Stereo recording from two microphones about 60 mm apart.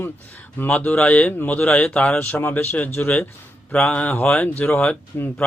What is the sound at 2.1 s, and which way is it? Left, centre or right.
Speech, left.